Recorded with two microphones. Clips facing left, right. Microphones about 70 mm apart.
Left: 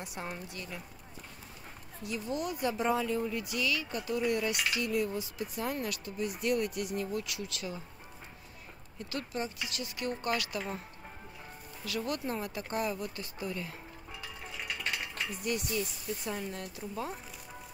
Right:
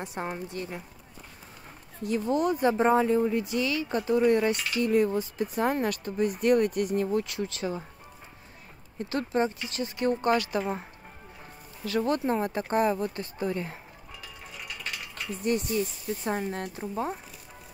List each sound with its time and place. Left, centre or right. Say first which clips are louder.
0.0 s speech: right 7 dB; right
2.0 s speech: right 9 dB; right
8.9 s speech: right 9 dB; right
11.8 s speech: right 8 dB; right
15.4 s speech: right 8 dB; right
16.8 s speech: right 6 dB; right